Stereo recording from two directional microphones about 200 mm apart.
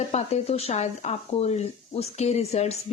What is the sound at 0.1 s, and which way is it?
Speech, 30° left (ahead or behind).